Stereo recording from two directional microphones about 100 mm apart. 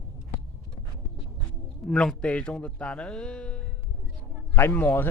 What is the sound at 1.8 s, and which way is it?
A man's voice, 10° left (ahead or behind).